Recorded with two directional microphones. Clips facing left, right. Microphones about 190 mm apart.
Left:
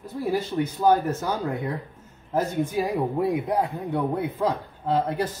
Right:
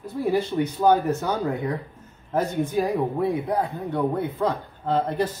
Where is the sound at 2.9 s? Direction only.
15° left (ahead or behind).